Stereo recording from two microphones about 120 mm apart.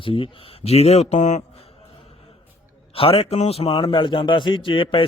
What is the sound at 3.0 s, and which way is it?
Speech, 55° left (ahead or behind).